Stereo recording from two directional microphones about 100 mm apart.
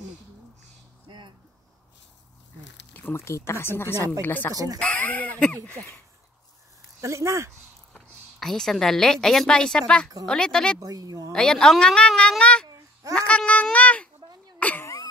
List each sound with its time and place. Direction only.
1.0 s a sound: 50° right (ahead or behind)
3.1 s speech: 30° left (ahead or behind); by 5.9 s 15° left (ahead or behind)
7.0 s speech: 30° right (ahead or behind)
7.9 s speech: 5° left (ahead or behind)
10.8 s speech: 40° right (ahead or behind)
11.3 s speech: 5° left (ahead or behind)
12.6 s babbling: 35° right (ahead or behind)
13.3 s speech: 15° left (ahead or behind)
14.6 s a sound: 15° left (ahead or behind)